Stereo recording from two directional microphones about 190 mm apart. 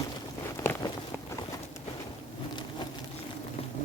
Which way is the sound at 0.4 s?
15° left (ahead or behind).